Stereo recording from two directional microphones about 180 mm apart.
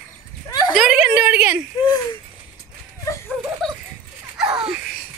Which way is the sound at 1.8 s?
25° left (ahead or behind).